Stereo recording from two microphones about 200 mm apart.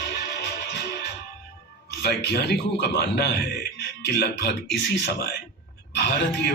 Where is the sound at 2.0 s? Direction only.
55° left (ahead or behind).